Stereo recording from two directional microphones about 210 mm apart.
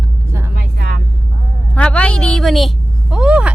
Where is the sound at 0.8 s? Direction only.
45° right (ahead or behind).